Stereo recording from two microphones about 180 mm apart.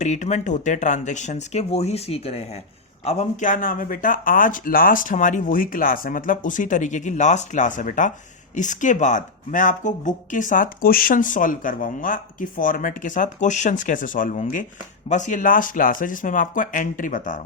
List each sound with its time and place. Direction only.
0.0 s speech: 40° left (ahead or behind)